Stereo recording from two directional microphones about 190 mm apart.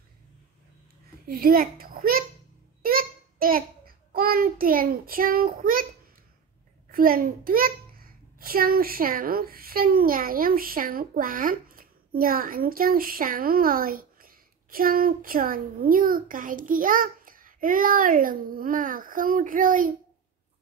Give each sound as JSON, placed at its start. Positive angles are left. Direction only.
{"t": 1.2, "sound": "a child's voice", "side_deg": -50}
{"t": 2.8, "sound": "a sound", "side_deg": -50}
{"t": 6.9, "sound": "a child's voice", "side_deg": -50}